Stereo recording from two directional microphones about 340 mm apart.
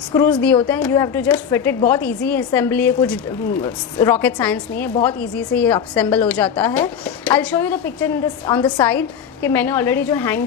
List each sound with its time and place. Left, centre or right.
0.1 s speech: centre